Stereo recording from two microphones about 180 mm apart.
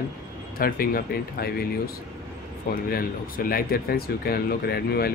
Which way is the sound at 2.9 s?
55° left (ahead or behind).